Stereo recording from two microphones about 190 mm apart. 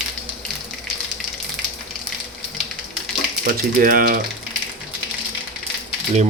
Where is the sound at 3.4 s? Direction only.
45° right (ahead or behind).